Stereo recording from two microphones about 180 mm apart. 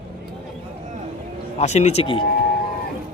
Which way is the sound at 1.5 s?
40° left (ahead or behind).